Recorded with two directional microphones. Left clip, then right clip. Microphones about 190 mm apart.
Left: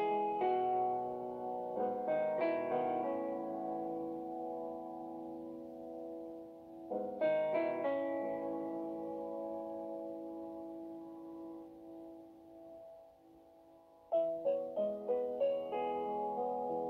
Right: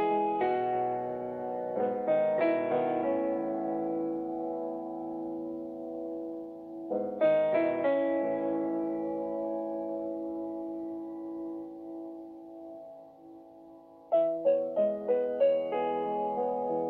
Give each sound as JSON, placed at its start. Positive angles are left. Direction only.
{"t": 0.0, "sound": "music", "side_deg": -35}
{"t": 6.9, "sound": "music", "side_deg": -35}
{"t": 14.1, "sound": "music", "side_deg": -35}